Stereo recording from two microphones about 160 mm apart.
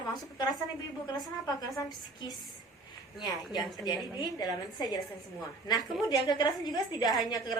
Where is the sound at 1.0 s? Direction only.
25° left (ahead or behind).